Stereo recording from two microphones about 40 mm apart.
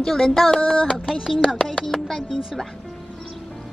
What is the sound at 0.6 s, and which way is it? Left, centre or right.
Speech, left.